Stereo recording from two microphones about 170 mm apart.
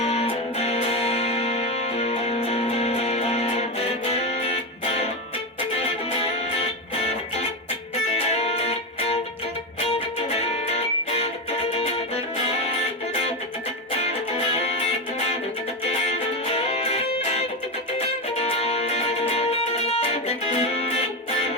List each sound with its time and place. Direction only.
0.0 s music: 40° left (ahead or behind)
8.3 s music: 35° left (ahead or behind)
10.2 s music: 35° left (ahead or behind)
14.0 s music: 35° left (ahead or behind)